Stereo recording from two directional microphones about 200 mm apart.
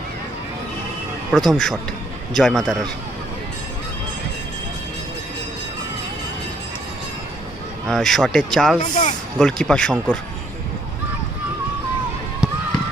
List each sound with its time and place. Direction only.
1.3 s speech: centre (ahead or behind)
7.9 s speech: centre (ahead or behind)
8.8 s speech: 35° left (ahead or behind)
9.4 s speech: 5° left (ahead or behind)